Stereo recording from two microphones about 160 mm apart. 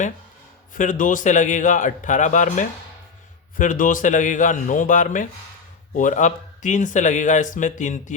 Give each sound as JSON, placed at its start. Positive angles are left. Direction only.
{"t": 0.7, "sound": "speech", "side_deg": 55}